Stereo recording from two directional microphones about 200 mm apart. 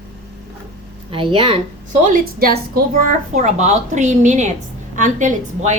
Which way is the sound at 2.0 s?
45° right (ahead or behind).